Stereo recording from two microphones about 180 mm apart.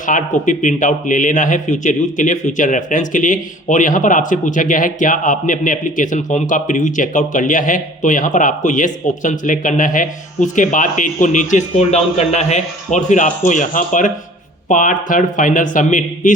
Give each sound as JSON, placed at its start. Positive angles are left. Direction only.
{"t": 0.0, "sound": "speech", "side_deg": 45}